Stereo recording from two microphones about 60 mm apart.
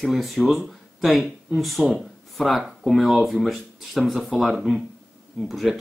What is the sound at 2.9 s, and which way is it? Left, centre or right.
Speech, centre.